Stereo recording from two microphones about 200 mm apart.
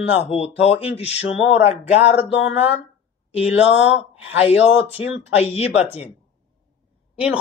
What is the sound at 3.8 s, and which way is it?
Speech, 5° right (ahead or behind).